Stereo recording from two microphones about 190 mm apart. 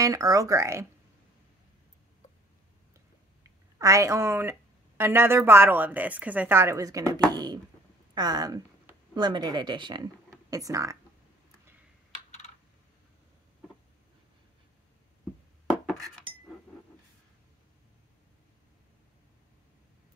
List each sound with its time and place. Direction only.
0.0 s speech: 20° right (ahead or behind)
3.4 s a woman's voice: 15° right (ahead or behind)